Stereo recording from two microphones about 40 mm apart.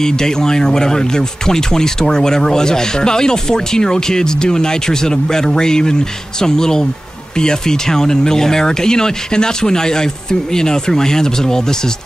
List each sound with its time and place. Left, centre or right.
0.0 s speech: centre